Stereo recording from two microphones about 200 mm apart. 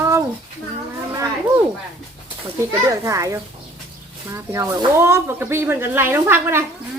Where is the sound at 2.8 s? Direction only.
15° right (ahead or behind).